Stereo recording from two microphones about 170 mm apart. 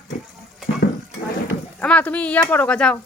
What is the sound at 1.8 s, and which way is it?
Speech, 10° left (ahead or behind).